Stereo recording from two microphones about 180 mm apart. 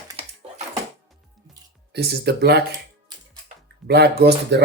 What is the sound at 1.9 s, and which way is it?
Speech, 65° right (ahead or behind).